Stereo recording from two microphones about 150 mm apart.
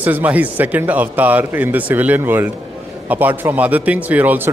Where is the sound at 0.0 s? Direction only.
10° right (ahead or behind).